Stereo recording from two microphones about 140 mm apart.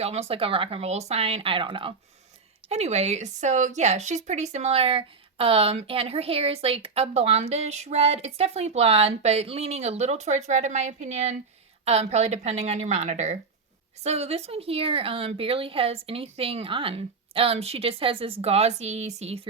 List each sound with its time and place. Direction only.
0.0 s a woman's voice: 45° right (ahead or behind)
2.6 s a woman's voice: 50° right (ahead or behind)